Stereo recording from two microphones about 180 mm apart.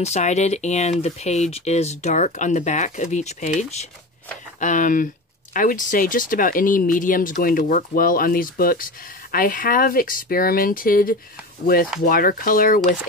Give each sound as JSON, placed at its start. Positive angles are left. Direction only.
{"t": 0.0, "sound": "speech", "side_deg": 40}